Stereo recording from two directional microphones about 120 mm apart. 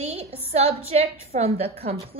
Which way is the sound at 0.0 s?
60° right (ahead or behind).